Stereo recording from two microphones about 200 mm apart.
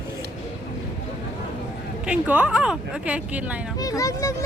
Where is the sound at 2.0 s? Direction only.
5° right (ahead or behind).